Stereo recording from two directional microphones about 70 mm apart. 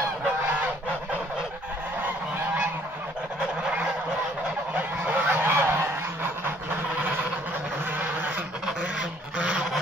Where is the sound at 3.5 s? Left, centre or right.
Centre; by 6.5 s right.